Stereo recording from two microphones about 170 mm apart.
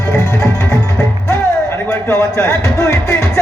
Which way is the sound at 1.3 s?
15° left (ahead or behind).